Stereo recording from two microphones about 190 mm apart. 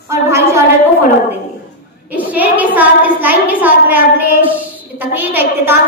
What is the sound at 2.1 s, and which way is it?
A woman's voice, 10° right (ahead or behind).